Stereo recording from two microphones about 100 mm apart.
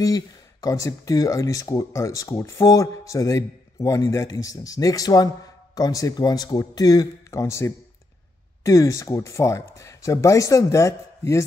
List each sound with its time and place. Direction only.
0.0 s speech: 35° left (ahead or behind)